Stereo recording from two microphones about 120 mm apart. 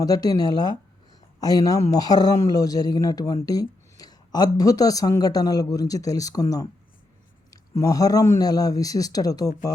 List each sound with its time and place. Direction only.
0.0 s speech: 30° left (ahead or behind)